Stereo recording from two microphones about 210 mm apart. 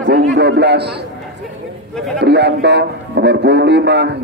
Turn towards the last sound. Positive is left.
turn(degrees=-55)  # may be behind; listen again after turning